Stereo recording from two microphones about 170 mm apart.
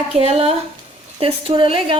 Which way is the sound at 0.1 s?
35° right (ahead or behind).